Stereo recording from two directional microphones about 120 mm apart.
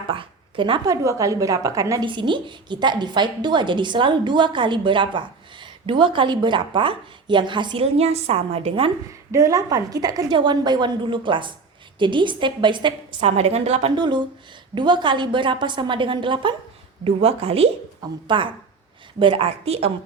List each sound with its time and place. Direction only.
0.1 s a sound: 45° right (ahead or behind)
0.9 s a woman's voice: 25° right (ahead or behind)
2.0 s a woman's voice: 40° right (ahead or behind)
7.9 s a woman's voice: 60° right (ahead or behind)
9.3 s a woman's voice: 30° right (ahead or behind)
13.2 s a woman's voice: 60° right (ahead or behind)
13.9 s a woman's voice: 40° right (ahead or behind)
19.5 s a woman's voice: 60° right (ahead or behind)